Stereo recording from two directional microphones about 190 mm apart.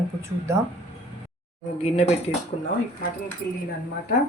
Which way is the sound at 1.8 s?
35° left (ahead or behind).